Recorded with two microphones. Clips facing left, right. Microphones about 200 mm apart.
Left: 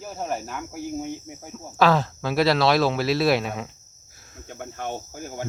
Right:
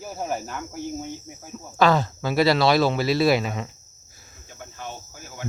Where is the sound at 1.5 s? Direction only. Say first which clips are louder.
Even; centre (ahead or behind).